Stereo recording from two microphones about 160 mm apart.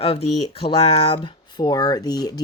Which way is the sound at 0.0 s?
35° left (ahead or behind).